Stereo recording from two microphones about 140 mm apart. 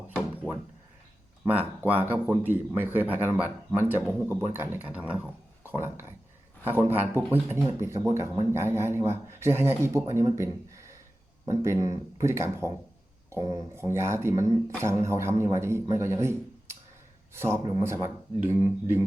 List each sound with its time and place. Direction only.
1.5 s speech: 10° right (ahead or behind)